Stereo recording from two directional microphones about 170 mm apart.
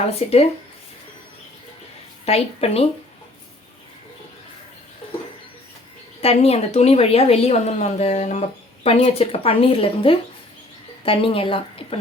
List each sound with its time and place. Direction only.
0.2 s a woman's voice: 35° left (ahead or behind)
2.2 s a woman's voice: 40° left (ahead or behind)
6.2 s a woman's voice: 35° left (ahead or behind)